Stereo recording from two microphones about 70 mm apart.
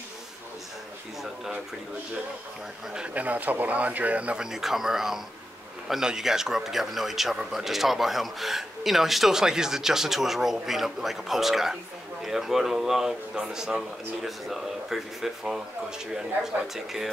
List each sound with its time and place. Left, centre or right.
2.9 s speech: centre
4.5 s speech: centre
16.7 s speech: centre